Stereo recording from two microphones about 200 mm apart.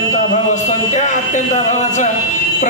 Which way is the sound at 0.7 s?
35° left (ahead or behind).